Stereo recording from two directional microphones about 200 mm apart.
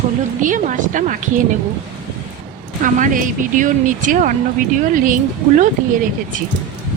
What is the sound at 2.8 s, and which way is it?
Speech, 40° right (ahead or behind).